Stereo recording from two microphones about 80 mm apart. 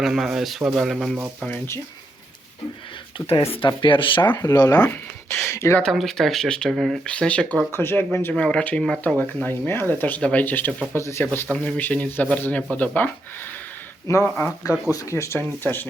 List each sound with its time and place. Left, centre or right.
0.0 s speech: centre
3.2 s speech: left
4.5 s speech: left
4.9 s speech: left
5.8 s speech: centre
7.0 s speech: centre
7.7 s speech: left
8.4 s speech: centre
9.1 s speech: left
11.5 s speech: centre
14.3 s speech: left
14.9 s speech: left
15.4 s speech: left